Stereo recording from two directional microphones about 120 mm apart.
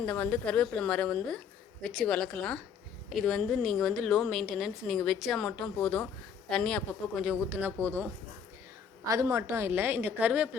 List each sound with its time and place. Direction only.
0.0 s a woman's voice: 15° left (ahead or behind)
7.2 s speech: 5° right (ahead or behind)
7.5 s a woman's voice: 20° right (ahead or behind)